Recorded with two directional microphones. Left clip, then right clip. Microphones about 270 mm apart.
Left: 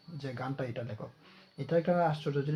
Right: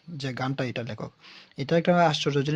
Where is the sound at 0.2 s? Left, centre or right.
Right.